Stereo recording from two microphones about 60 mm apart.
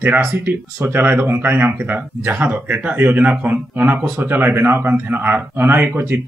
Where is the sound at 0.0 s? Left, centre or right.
Right.